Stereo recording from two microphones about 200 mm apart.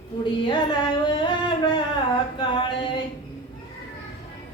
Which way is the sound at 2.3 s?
25° left (ahead or behind).